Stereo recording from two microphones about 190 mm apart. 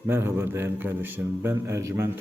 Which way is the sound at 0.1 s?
10° right (ahead or behind).